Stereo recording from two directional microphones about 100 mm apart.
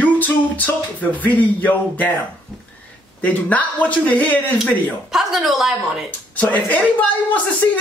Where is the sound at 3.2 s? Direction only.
15° left (ahead or behind).